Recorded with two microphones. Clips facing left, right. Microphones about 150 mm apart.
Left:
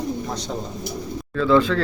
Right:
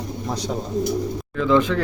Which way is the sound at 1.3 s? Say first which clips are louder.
Left 1 dB; 15° right (ahead or behind).